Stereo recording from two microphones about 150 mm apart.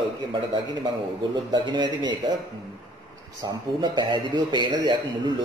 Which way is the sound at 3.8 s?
30° right (ahead or behind).